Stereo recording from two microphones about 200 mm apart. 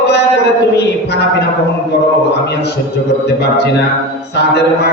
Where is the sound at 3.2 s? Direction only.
55° left (ahead or behind).